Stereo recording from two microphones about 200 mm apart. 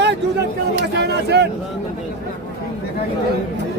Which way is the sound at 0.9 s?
55° right (ahead or behind).